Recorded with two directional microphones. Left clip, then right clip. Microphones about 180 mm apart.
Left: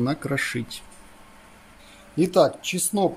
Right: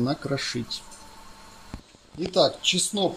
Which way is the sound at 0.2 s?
20° left (ahead or behind).